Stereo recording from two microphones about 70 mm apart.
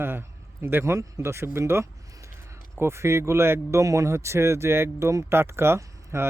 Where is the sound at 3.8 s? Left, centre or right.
Right.